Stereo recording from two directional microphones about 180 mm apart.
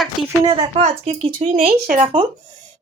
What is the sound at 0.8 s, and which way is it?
Speech, 35° right (ahead or behind).